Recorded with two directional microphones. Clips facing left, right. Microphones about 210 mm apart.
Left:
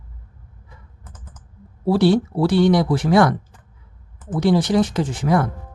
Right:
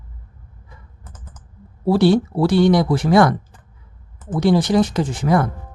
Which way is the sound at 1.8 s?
45° right (ahead or behind).